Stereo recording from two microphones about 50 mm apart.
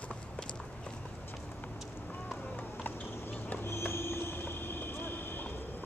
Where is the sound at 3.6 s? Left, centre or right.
Left.